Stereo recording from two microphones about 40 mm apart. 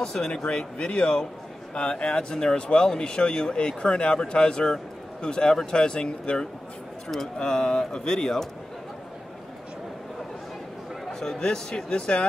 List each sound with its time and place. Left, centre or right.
0.0 s speech: centre
0.3 s speech: left
11.1 s speech: centre